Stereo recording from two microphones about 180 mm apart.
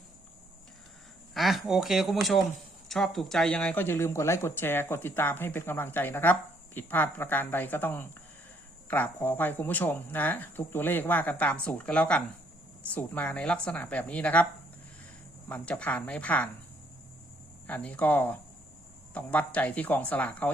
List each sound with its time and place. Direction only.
1.3 s speech: centre (ahead or behind)
15.4 s speech: 10° left (ahead or behind)
17.7 s speech: 10° left (ahead or behind)